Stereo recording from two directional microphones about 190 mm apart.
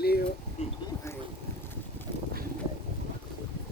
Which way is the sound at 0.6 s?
35° left (ahead or behind).